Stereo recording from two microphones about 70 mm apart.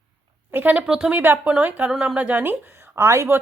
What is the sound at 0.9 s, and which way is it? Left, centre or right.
Speech, centre.